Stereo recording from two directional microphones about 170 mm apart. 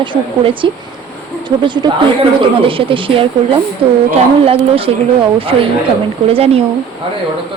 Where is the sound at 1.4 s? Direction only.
25° right (ahead or behind).